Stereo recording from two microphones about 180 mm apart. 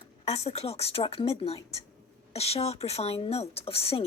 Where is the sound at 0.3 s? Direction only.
35° left (ahead or behind).